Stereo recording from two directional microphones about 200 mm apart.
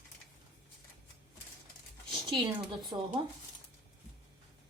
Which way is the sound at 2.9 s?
20° right (ahead or behind).